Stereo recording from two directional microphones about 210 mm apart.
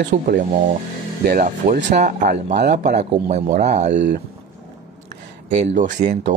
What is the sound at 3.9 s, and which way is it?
Speech, 55° right (ahead or behind).